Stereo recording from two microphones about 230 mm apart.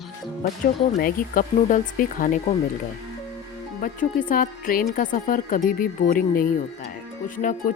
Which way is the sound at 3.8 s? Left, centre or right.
Left.